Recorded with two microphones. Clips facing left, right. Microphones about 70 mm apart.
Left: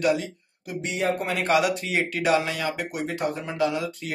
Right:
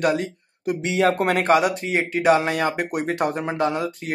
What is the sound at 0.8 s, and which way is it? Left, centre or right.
Speech, right.